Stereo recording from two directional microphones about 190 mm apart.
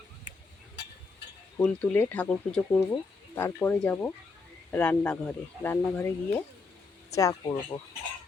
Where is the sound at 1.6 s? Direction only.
10° left (ahead or behind).